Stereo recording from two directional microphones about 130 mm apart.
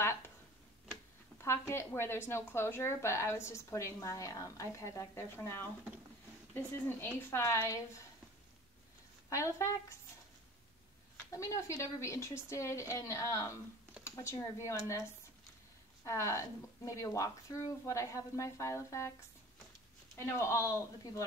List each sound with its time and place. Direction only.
1.4 s a woman's voice: 20° left (ahead or behind)
9.3 s a woman's voice: 25° left (ahead or behind)
11.3 s a woman's voice: 25° left (ahead or behind)
20.3 s a woman's voice: 20° left (ahead or behind)